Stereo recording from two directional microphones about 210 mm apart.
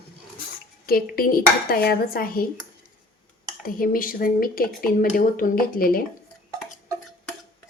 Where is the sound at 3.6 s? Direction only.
40° left (ahead or behind).